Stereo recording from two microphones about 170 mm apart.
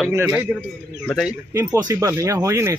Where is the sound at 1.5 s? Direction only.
20° right (ahead or behind).